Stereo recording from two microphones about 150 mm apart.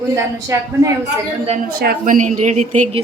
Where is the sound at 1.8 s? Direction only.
75° right (ahead or behind); by 3.0 s 50° right (ahead or behind).